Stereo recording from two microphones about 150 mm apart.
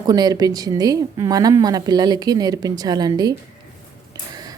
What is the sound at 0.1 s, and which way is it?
A woman's voice, 25° right (ahead or behind).